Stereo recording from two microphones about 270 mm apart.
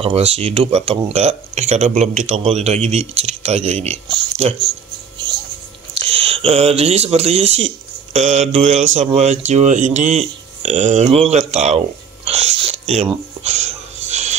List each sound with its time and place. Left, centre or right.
0.0 s speech: right
6.0 s speech: right
12.3 s a sound: right